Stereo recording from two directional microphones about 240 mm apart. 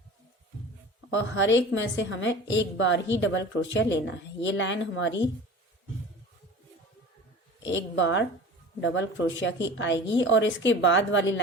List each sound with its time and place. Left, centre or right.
1.1 s a woman's voice: left
7.6 s a woman's voice: left